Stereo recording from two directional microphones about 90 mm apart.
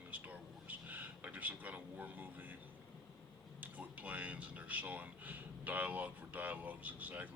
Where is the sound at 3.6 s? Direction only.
20° right (ahead or behind).